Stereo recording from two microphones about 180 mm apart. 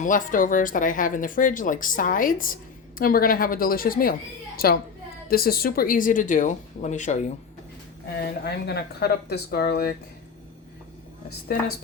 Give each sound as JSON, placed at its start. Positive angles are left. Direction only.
{"t": 0.0, "sound": "a woman's voice", "side_deg": 45}
{"t": 8.2, "sound": "speech", "side_deg": 65}